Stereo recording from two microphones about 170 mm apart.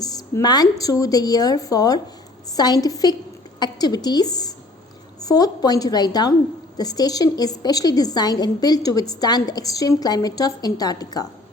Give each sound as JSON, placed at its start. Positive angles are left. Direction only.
{"t": 0.0, "sound": "a woman's voice", "side_deg": 20}